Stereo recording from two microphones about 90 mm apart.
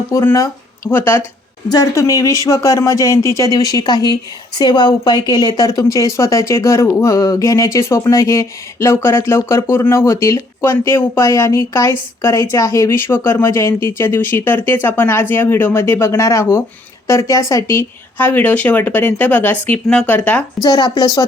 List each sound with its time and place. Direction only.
0.9 s speech: 25° left (ahead or behind)
2.0 s speech: 35° left (ahead or behind)
17.7 s speech: 25° left (ahead or behind)
20.6 s speech: 50° left (ahead or behind)